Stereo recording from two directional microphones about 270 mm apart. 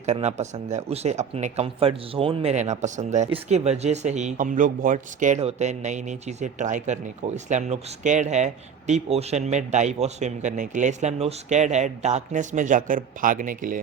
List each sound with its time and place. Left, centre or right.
0.0 s speech: right